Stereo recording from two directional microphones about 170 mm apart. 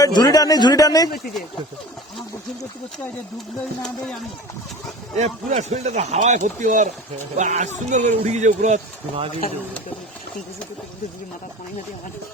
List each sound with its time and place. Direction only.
0.0 s a man's voice: 25° left (ahead or behind)
3.8 s speech: 5° left (ahead or behind)
5.1 s speech: 45° right (ahead or behind)